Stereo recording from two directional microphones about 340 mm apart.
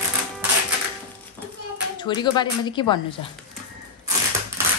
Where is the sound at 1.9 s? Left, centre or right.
Centre.